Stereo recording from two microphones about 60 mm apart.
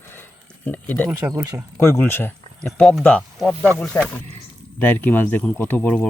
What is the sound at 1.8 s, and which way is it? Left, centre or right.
Speech, left.